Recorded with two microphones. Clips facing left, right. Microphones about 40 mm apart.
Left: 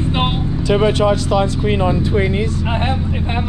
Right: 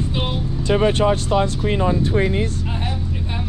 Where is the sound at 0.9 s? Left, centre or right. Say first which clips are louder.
Left 3 dB; left.